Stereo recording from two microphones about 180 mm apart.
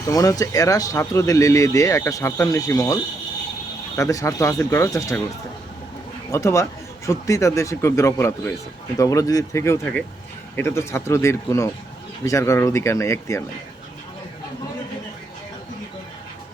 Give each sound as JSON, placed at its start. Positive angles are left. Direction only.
{"t": 0.1, "sound": "speech", "side_deg": 20}
{"t": 6.3, "sound": "speech", "side_deg": 15}